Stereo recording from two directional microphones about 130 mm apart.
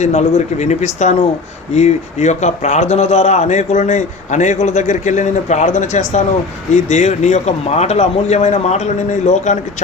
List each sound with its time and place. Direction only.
0.0 s a man's voice: 60° left (ahead or behind)